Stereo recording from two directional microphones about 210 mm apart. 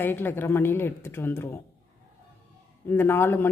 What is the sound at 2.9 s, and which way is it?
Speech, 10° left (ahead or behind).